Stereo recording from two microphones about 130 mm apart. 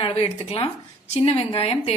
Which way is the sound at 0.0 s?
45° left (ahead or behind).